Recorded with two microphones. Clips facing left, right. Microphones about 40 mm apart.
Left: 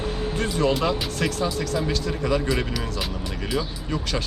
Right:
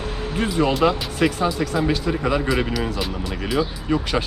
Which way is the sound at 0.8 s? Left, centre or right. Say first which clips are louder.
Right 5 dB; centre.